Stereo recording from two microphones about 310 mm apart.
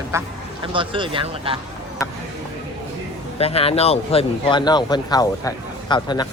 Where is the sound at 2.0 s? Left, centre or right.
Centre.